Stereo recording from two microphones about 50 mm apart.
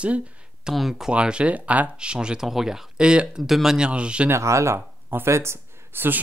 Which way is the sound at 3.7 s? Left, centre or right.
Right.